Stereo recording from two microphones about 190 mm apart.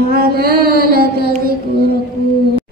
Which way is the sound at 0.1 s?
55° right (ahead or behind).